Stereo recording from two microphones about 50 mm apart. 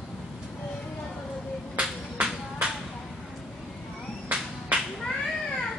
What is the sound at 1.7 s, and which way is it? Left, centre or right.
Music, right.